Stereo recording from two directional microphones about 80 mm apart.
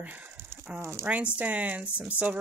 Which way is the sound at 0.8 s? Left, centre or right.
Right.